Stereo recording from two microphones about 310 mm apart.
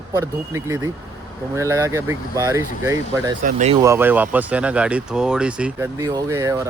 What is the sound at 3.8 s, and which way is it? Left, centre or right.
Speech, centre.